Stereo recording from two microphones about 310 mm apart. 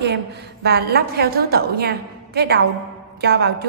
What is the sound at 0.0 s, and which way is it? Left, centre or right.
A woman's voice, right.